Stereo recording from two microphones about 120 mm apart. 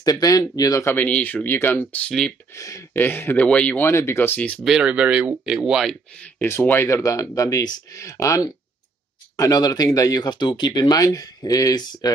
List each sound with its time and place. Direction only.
0.0 s speech: 30° left (ahead or behind); by 2.3 s 5° left (ahead or behind)
2.5 s speech: 25° left (ahead or behind)
4.7 s speech: 10° right (ahead or behind)
6.4 s speech: 20° left (ahead or behind)
9.4 s speech: 30° left (ahead or behind)